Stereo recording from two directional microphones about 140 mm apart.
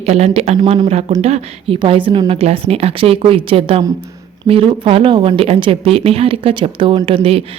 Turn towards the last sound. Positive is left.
turn(degrees=-40)  # may be behind; listen again after turning